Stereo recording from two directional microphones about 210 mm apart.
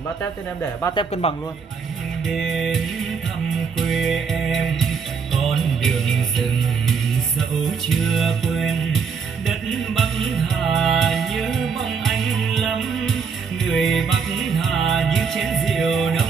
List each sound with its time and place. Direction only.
1.2 s a man's voice: 30° left (ahead or behind)
2.2 s music: centre (ahead or behind)
7.9 s music: centre (ahead or behind)